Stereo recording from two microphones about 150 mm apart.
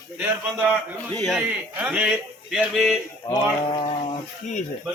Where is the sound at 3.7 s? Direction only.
35° left (ahead or behind).